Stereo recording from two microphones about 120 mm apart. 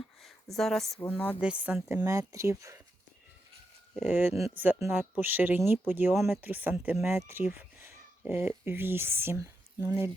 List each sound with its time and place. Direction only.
0.2 s a sound: centre (ahead or behind)
0.9 s speech: 15° left (ahead or behind)
1.4 s speech: 10° right (ahead or behind)
2.0 s speech: 25° right (ahead or behind)
4.1 s speech: 15° right (ahead or behind)